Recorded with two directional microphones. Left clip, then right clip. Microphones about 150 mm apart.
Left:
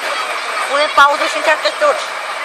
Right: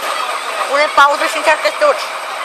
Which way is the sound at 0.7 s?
30° right (ahead or behind).